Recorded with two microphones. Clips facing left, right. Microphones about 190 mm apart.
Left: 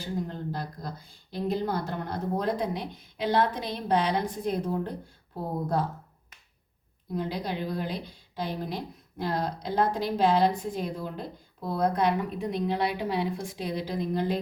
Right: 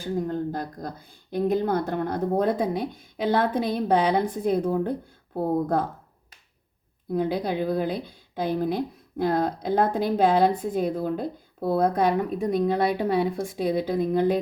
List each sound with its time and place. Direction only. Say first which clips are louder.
0.0 s speech: right 6 dB; 45° right (ahead or behind)
7.1 s speech: right 6 dB; 50° right (ahead or behind)